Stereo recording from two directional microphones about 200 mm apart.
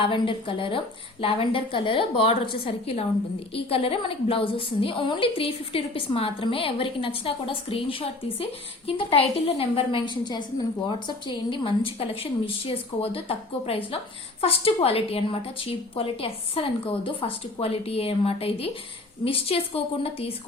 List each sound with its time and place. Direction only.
0.0 s a woman's voice: 25° left (ahead or behind)